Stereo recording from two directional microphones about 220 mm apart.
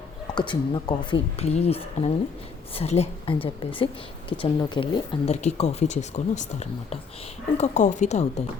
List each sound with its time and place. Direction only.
0.3 s a woman's voice: 20° left (ahead or behind)